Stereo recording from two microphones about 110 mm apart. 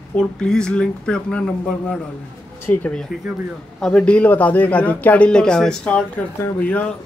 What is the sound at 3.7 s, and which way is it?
Speech, 5° left (ahead or behind).